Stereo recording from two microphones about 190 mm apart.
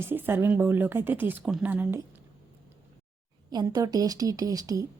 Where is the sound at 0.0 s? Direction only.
10° right (ahead or behind).